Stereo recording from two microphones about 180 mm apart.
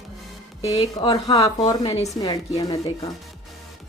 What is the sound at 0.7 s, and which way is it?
A woman's voice, 25° left (ahead or behind).